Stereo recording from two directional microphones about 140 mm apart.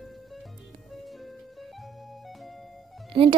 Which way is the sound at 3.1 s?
40° right (ahead or behind).